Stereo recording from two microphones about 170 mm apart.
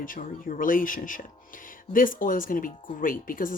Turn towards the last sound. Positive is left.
turn(degrees=55)  # may be behind; listen again after turning